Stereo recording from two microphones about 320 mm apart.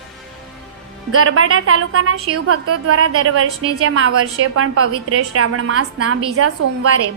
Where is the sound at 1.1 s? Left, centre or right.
Right.